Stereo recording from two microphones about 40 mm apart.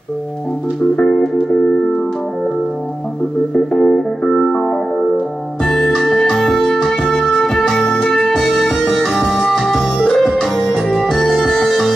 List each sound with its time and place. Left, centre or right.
1.0 s music: centre
3.7 s music: centre
8.4 s music: centre
10.9 s organ: centre
11.1 s organ: centre
11.4 s music: centre